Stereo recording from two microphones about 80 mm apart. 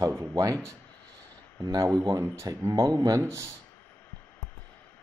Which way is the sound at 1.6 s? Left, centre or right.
Right.